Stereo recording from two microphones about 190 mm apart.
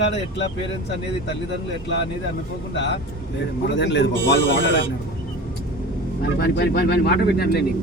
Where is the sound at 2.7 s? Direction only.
70° left (ahead or behind).